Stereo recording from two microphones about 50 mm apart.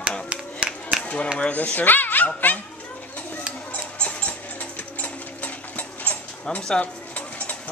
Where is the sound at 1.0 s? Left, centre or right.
Left.